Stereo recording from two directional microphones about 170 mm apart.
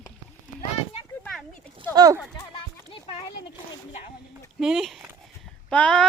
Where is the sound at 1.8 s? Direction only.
25° right (ahead or behind).